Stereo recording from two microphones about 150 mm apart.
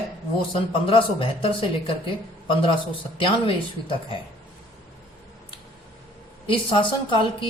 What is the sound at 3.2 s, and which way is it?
Speech, 35° left (ahead or behind).